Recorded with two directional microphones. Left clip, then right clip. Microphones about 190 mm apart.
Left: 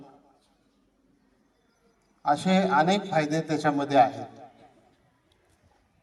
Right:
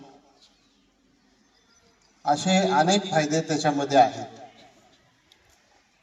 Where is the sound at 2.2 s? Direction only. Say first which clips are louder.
Right 2 dB; 5° left (ahead or behind).